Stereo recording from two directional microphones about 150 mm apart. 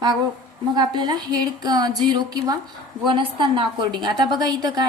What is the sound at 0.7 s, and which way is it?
A woman's voice, 30° right (ahead or behind).